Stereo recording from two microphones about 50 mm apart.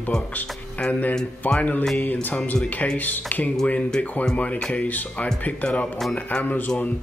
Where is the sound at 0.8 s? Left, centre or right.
Left.